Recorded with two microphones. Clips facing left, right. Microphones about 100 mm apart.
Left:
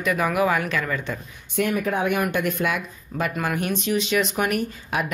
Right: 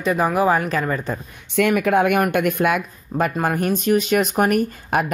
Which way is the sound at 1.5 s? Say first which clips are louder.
Right 6 dB; 90° right.